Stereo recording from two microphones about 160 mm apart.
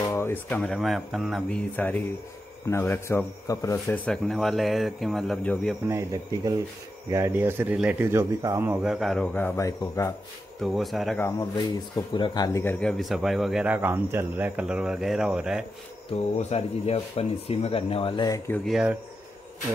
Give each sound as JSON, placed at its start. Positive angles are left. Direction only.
{"t": 0.1, "sound": "music", "side_deg": 15}
{"t": 0.6, "sound": "speech", "side_deg": 0}
{"t": 1.8, "sound": "speech", "side_deg": 10}
{"t": 5.9, "sound": "speech", "side_deg": -20}
{"t": 9.6, "sound": "speech", "side_deg": 20}
{"t": 10.6, "sound": "speech", "side_deg": 0}
{"t": 11.1, "sound": "speech", "side_deg": 15}
{"t": 12.1, "sound": "speech", "side_deg": 30}
{"t": 12.6, "sound": "speech", "side_deg": 5}
{"t": 16.1, "sound": "speech", "side_deg": 40}
{"t": 18.7, "sound": "speech", "side_deg": -5}